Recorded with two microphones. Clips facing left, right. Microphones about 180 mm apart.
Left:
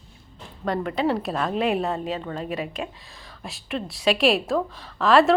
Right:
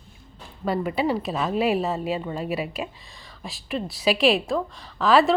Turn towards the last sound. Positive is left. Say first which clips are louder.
# left 1 dB
turn(degrees=0)  # may be behind; listen again after turning